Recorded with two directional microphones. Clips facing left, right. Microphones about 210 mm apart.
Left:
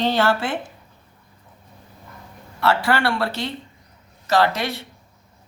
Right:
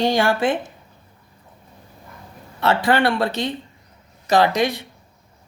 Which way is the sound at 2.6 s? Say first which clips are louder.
Right 2 dB; 20° right (ahead or behind).